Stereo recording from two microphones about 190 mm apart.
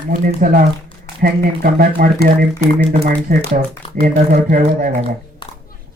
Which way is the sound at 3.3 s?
55° right (ahead or behind).